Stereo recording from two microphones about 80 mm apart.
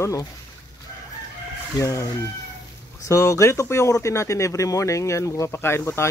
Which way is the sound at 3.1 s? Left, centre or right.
Left.